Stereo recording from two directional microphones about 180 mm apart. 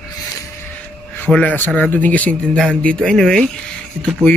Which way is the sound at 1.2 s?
10° left (ahead or behind).